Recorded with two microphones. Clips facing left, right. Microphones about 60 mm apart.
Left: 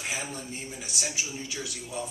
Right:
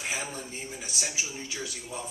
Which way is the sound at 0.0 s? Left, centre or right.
Centre.